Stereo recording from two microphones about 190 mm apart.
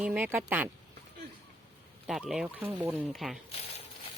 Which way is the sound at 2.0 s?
Centre (ahead or behind).